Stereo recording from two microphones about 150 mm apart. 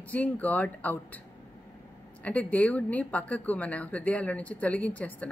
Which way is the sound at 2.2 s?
10° left (ahead or behind).